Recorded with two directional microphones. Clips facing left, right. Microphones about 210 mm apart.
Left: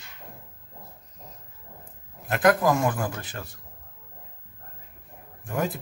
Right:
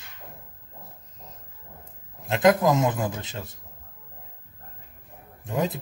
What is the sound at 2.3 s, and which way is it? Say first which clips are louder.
Speech: right 1 dB; 20° right (ahead or behind).